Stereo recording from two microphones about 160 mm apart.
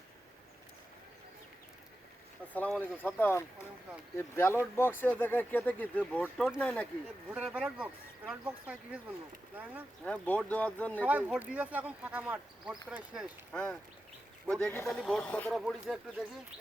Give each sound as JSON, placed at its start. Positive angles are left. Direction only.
{"t": 2.5, "sound": "speech", "side_deg": 5}
{"t": 7.3, "sound": "speech", "side_deg": -10}
{"t": 10.0, "sound": "speech", "side_deg": 5}
{"t": 11.0, "sound": "speech", "side_deg": -10}
{"t": 13.5, "sound": "speech", "side_deg": 5}